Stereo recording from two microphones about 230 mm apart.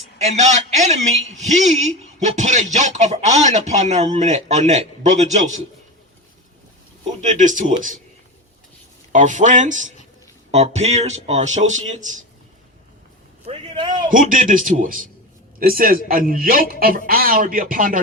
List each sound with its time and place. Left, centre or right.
0.2 s a man's voice: right
7.2 s a man's voice: right
9.1 s a man's voice: right
13.4 s a man's voice: right
14.1 s a man's voice: right